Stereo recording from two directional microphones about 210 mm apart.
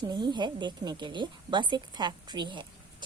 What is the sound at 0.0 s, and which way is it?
Speech, 20° right (ahead or behind).